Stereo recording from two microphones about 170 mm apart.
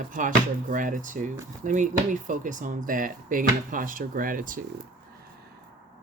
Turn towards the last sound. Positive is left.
turn(degrees=-55)  # may be behind; listen again after turning